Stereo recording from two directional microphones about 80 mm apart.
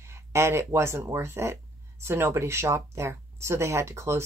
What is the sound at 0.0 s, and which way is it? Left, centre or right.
Speech, right.